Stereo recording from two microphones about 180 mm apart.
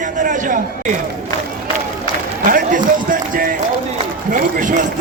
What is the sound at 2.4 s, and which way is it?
Run, 50° right (ahead or behind).